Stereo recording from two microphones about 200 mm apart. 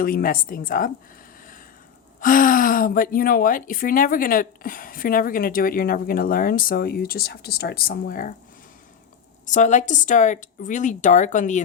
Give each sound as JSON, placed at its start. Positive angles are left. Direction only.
{"t": 0.0, "sound": "a woman's voice", "side_deg": 45}
{"t": 2.2, "sound": "a woman's voice", "side_deg": 40}
{"t": 9.5, "sound": "a woman's voice", "side_deg": 35}